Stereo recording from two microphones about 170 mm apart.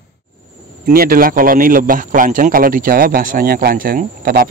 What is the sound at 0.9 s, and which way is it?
Speech, 60° right (ahead or behind).